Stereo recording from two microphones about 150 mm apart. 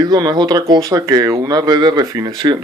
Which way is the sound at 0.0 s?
25° right (ahead or behind).